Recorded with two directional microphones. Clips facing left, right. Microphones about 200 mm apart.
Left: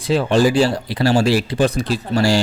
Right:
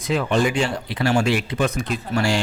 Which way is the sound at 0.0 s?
30° left (ahead or behind).